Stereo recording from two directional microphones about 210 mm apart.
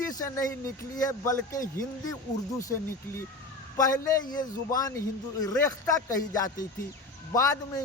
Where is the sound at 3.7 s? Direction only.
15° left (ahead or behind).